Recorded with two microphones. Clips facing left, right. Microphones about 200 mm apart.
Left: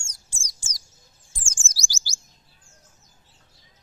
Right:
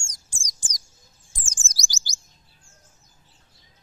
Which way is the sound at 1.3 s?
15° right (ahead or behind).